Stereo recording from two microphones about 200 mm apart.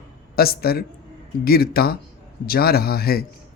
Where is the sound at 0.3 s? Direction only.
50° left (ahead or behind).